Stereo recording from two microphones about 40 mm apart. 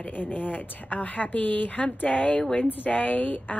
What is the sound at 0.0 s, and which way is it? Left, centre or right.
A woman's voice, left.